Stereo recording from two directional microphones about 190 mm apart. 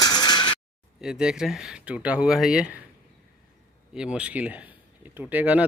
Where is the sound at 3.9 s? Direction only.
5° right (ahead or behind).